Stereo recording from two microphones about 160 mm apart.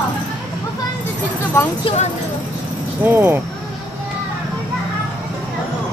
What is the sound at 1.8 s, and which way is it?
Speech, 45° left (ahead or behind).